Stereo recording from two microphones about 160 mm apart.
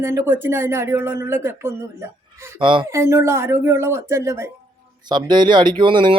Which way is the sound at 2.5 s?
30° right (ahead or behind).